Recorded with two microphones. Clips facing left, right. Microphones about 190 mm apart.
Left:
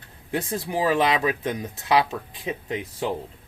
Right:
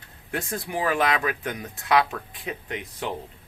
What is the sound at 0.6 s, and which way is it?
Speech, 25° left (ahead or behind).